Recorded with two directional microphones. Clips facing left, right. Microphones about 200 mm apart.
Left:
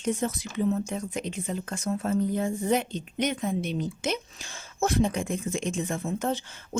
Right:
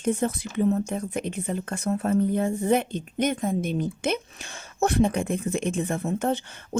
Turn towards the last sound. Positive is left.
turn(degrees=-60)  # may be behind; listen again after turning